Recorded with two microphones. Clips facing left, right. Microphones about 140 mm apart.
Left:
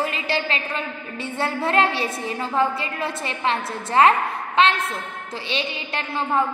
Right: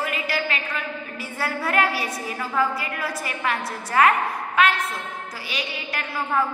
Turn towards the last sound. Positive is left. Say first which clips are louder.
# left 2 dB
turn(degrees=25)  # may be behind; listen again after turning